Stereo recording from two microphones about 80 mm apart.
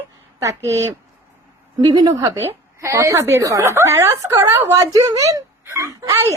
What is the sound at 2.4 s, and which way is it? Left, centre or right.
A woman's voice, right.